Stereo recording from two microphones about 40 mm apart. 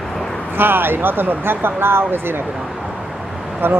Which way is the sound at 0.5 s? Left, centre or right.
Right.